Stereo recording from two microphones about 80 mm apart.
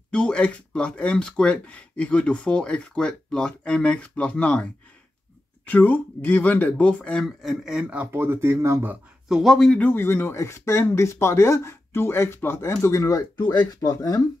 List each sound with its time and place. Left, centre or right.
0.1 s speech: centre
5.7 s speech: left
7.4 s a man's voice: centre
8.0 s speech: right
9.3 s speech: centre
9.8 s speech: left
13.4 s speech: left